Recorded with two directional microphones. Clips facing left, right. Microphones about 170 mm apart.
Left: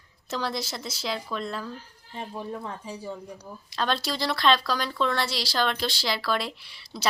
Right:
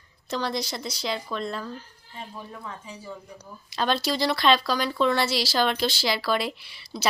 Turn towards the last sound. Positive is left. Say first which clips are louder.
# right 3 dB
turn(degrees=-5)  # may be behind; listen again after turning